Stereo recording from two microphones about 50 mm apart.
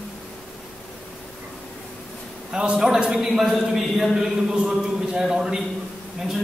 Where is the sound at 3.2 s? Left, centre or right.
Centre.